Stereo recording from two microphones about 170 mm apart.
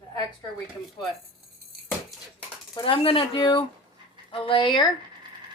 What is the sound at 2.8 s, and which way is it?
A woman's voice, 30° left (ahead or behind).